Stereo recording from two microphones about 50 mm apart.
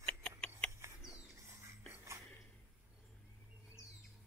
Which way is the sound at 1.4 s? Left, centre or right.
Right.